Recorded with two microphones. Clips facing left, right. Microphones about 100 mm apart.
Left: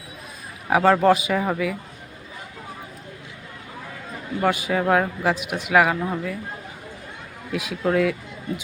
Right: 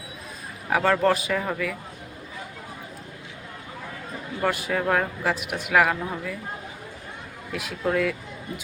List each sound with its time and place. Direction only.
0.7 s a man's voice: 20° left (ahead or behind)
1.0 s speech: 5° left (ahead or behind)
1.3 s speech: 15° left (ahead or behind)
4.4 s speech: 5° left (ahead or behind)
7.5 s speech: 5° left (ahead or behind)